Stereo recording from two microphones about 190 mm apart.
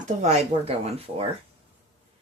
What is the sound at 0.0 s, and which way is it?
Speech, 35° right (ahead or behind).